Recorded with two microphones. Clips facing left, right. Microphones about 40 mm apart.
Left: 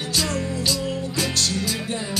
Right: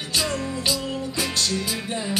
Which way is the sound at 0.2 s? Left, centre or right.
Centre.